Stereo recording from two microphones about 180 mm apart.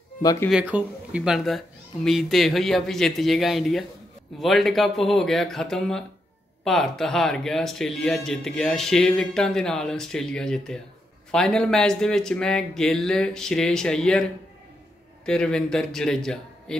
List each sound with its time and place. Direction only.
0.2 s speech: 20° left (ahead or behind)
0.5 s speech: 5° right (ahead or behind)